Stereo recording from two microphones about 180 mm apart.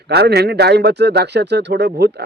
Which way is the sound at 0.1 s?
65° right (ahead or behind).